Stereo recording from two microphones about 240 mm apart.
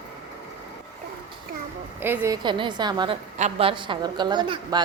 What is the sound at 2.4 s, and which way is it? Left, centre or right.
A woman's voice, centre.